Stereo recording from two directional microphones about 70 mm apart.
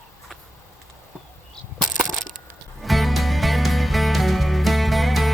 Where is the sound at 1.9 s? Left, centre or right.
Centre.